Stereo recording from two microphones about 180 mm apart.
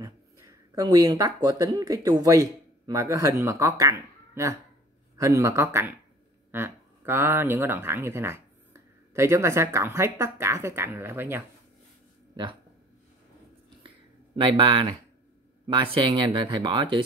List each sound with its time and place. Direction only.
0.0 s speech: 20° right (ahead or behind)
13.8 s a sound: 30° right (ahead or behind)
15.6 s speech: 25° right (ahead or behind)